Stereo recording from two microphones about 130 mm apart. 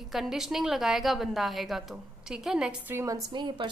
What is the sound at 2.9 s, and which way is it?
Speech, 25° right (ahead or behind).